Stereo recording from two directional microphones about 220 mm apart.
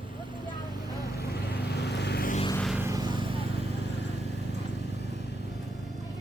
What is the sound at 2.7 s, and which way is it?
Vehicle, 15° right (ahead or behind).